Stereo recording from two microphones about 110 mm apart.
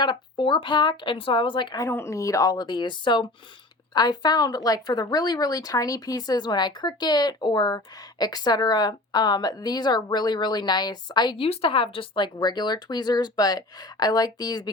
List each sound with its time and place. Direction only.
0.0 s speech: 45° left (ahead or behind)
1.9 s speech: 25° left (ahead or behind); by 11.4 s 40° left (ahead or behind)
11.4 s speech: 65° left (ahead or behind); by 14.7 s 35° left (ahead or behind)